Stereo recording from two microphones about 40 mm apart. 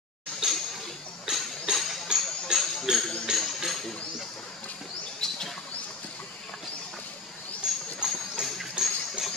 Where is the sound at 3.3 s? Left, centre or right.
Centre.